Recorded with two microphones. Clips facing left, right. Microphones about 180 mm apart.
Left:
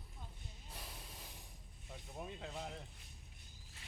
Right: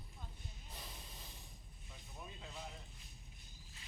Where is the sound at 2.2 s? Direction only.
60° left (ahead or behind).